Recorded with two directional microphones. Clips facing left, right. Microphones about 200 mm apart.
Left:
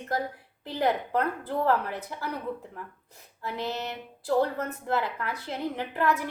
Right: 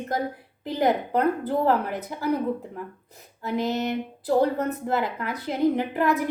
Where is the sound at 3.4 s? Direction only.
15° right (ahead or behind).